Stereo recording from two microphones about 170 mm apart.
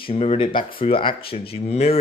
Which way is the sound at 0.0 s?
35° left (ahead or behind).